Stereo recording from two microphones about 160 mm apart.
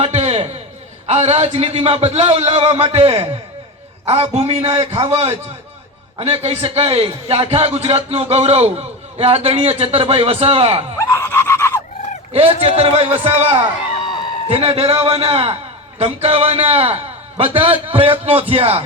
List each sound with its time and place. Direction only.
0.0 s a sound: 45° right (ahead or behind)
1.0 s a man's voice: 40° right (ahead or behind)
11.1 s screaming: 15° left (ahead or behind)
12.3 s a man's voice: 35° right (ahead or behind)